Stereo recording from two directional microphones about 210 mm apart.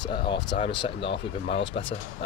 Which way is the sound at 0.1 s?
25° left (ahead or behind).